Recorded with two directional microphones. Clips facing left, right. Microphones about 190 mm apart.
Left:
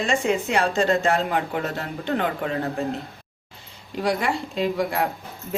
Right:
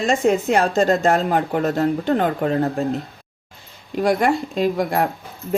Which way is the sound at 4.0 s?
45° right (ahead or behind).